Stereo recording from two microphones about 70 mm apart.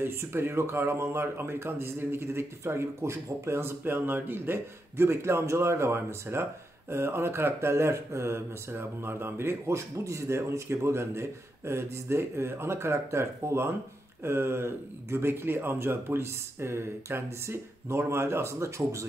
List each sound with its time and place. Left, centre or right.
0.0 s speech: right